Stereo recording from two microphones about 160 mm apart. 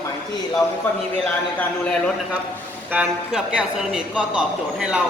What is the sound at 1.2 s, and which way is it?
Speech, 5° left (ahead or behind).